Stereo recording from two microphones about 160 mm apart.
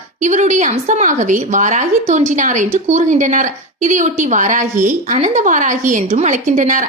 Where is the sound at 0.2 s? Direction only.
50° right (ahead or behind).